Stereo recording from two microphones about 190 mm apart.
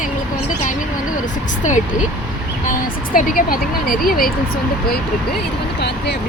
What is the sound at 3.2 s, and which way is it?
Speech, 50° left (ahead or behind).